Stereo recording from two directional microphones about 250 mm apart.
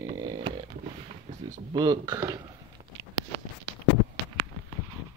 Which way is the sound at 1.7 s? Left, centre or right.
Centre.